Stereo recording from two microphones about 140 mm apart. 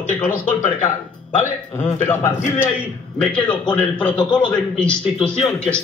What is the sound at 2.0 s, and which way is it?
A man's voice, 20° left (ahead or behind).